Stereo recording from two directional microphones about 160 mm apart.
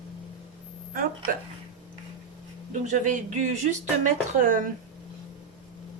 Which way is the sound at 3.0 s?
50° right (ahead or behind).